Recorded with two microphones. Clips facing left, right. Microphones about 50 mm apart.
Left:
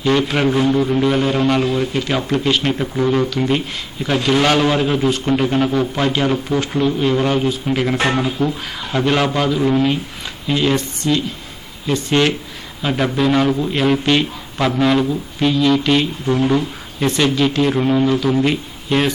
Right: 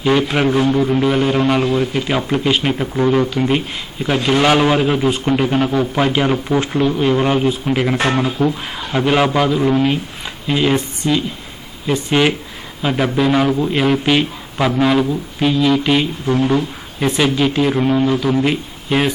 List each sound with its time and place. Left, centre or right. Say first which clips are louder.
0.0 s a man's voice: right 1 dB; centre